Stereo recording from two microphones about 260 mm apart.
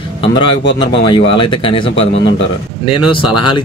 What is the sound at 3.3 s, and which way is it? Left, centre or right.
Speech, left.